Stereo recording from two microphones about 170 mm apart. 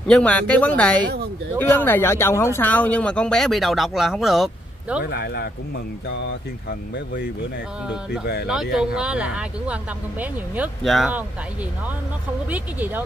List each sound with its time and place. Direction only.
0.1 s speech: 5° left (ahead or behind)
5.0 s speech: 75° left (ahead or behind)
8.7 s speech: 5° right (ahead or behind)
12.4 s speech: 10° right (ahead or behind)